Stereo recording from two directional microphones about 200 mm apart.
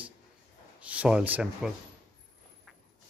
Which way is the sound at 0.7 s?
5° right (ahead or behind).